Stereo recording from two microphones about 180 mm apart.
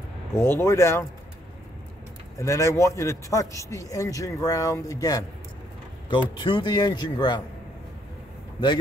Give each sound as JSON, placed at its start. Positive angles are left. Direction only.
{"t": 0.3, "sound": "a man's voice", "side_deg": 15}
{"t": 2.3, "sound": "a man's voice", "side_deg": 15}